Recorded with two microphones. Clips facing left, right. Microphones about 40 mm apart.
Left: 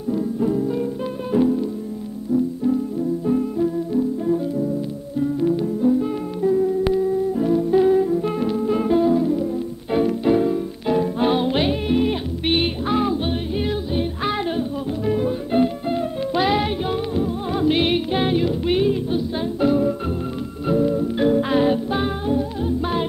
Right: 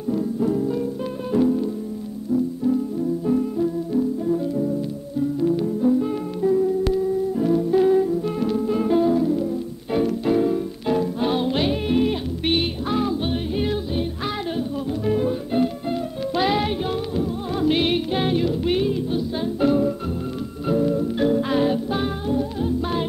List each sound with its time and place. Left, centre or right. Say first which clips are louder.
0.4 s music: left 2 dB; centre
3.3 s music: left 1 dB; centre
5.6 s music: left 1 dB; centre
7.4 s music: left 1 dB; centre
8.1 s music: left 2 dB; left
8.4 s music: left 1 dB; centre
11.0 s music: left 4 dB; left
11.7 s music: left 1 dB; centre
12.5 s music: left 4 dB; centre
13.3 s music: even; centre
14.2 s music: left 3 dB; centre
15.0 s music: even; centre
15.5 s music: left 6 dB; centre
16.3 s music: left 1 dB; centre